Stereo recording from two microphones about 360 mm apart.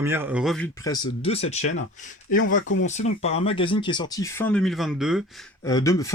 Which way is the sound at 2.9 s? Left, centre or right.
Centre.